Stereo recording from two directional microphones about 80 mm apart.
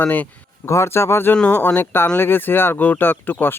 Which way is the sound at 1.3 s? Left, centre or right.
Centre.